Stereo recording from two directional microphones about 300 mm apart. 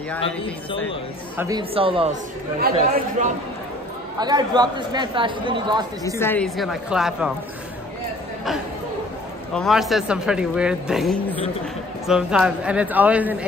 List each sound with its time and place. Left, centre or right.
0.2 s speech: centre
1.3 s speech: centre
1.6 s speech: centre
2.7 s speech: right
4.2 s speech: centre
6.0 s speech: centre
9.5 s speech: centre